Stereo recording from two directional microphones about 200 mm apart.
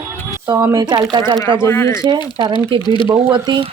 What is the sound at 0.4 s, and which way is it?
Speech, 20° right (ahead or behind).